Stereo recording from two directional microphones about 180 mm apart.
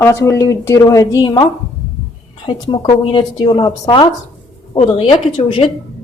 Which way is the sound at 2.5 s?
25° left (ahead or behind).